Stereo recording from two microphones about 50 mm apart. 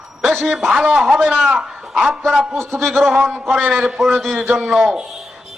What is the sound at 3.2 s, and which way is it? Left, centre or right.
A man's voice, centre.